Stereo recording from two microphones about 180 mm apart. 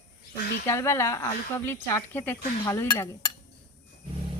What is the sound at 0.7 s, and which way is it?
Speech, 15° left (ahead or behind).